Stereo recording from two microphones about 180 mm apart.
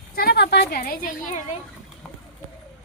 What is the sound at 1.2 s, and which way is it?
Speech, 45° left (ahead or behind).